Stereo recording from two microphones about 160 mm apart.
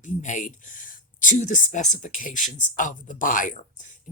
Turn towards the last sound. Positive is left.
turn(degrees=55)  # may be behind; listen again after turning